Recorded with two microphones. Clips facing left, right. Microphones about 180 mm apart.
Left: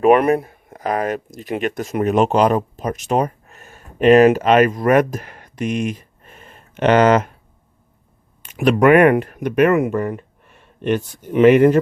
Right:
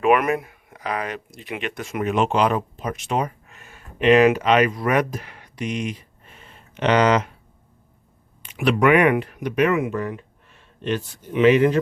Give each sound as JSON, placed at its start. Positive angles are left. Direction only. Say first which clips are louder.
{"t": 0.0, "sound": "speech", "louder": "left 5 dB", "side_deg": 35}
{"t": 8.4, "sound": "speech", "louder": "left 5 dB", "side_deg": 45}